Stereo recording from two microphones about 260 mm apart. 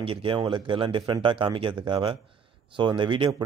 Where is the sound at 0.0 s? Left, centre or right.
Centre.